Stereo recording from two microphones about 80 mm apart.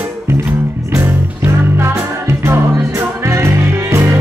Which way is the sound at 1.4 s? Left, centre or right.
Right.